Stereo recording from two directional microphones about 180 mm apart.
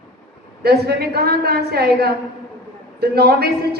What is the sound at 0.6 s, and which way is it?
A woman's voice, 60° right (ahead or behind).